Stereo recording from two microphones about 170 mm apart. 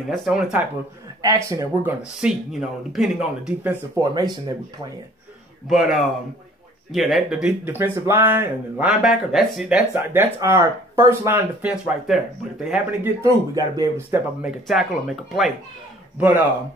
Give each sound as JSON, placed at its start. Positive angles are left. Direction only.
{"t": 0.1, "sound": "speech", "side_deg": 0}
{"t": 1.2, "sound": "speech", "side_deg": -20}
{"t": 2.2, "sound": "speech", "side_deg": 0}
{"t": 3.4, "sound": "speech", "side_deg": -10}
{"t": 5.7, "sound": "speech", "side_deg": 0}
{"t": 12.1, "sound": "speech", "side_deg": -5}
{"t": 13.2, "sound": "speech", "side_deg": -20}
{"t": 14.1, "sound": "speech", "side_deg": -5}
{"t": 16.2, "sound": "speech", "side_deg": -15}